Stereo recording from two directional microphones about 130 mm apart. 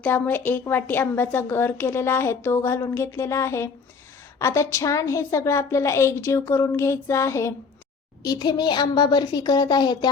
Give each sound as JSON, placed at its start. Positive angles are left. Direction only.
{"t": 0.0, "sound": "a woman's voice", "side_deg": 15}